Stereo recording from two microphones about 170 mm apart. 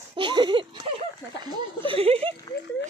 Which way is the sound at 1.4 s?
30° right (ahead or behind).